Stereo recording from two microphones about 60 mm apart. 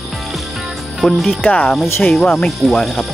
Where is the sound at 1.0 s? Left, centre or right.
Centre.